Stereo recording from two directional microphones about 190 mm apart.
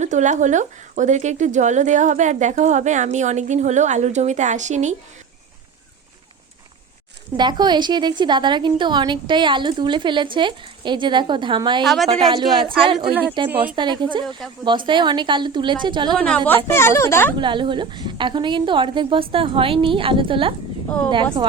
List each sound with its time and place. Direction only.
0.0 s speech: 40° right (ahead or behind)
7.3 s a woman's voice: 25° right (ahead or behind)
16.1 s a woman's voice: 5° left (ahead or behind)
17.3 s a woman's voice: 25° right (ahead or behind)